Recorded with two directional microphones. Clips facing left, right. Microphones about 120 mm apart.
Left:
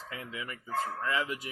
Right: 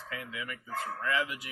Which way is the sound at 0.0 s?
25° left (ahead or behind).